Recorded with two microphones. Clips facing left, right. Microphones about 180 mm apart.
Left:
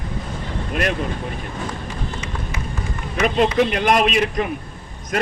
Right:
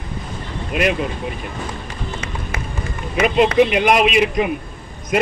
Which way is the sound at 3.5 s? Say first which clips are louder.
Right 3 dB; 10° right (ahead or behind).